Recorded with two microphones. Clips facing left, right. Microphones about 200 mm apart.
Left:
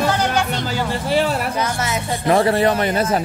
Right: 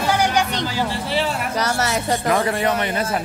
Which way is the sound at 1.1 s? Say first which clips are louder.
Left 7 dB; 45° left (ahead or behind).